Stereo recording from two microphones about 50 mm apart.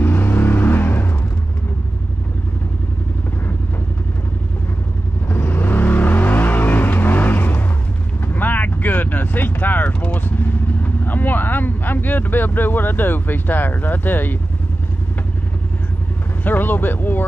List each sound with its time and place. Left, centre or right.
0.0 s vehicle: left
5.3 s vehicle: left
16.4 s speech: left